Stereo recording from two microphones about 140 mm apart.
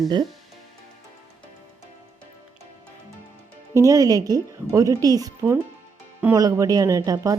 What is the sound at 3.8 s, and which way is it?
A woman's voice, 25° right (ahead or behind).